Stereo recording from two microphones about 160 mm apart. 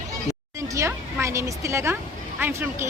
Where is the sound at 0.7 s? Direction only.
20° right (ahead or behind).